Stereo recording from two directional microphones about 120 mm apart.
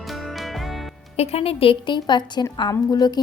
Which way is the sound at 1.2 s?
60° left (ahead or behind).